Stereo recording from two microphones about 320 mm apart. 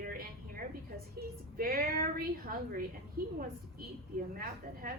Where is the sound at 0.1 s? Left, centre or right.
Right.